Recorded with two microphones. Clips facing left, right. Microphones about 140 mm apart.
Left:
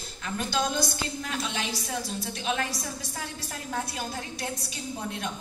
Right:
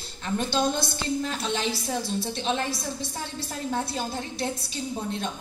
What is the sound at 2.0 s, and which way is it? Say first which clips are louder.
Speech: right 4 dB; 25° right (ahead or behind).